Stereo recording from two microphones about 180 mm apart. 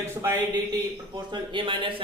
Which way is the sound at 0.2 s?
20° right (ahead or behind).